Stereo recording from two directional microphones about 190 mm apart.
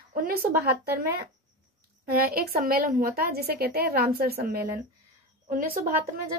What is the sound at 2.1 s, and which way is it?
A woman's voice, 50° right (ahead or behind).